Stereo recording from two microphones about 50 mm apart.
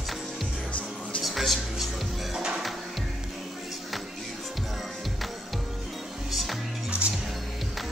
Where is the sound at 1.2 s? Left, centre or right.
Centre.